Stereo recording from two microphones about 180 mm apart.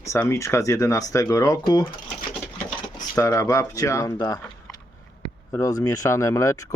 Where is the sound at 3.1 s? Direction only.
15° left (ahead or behind).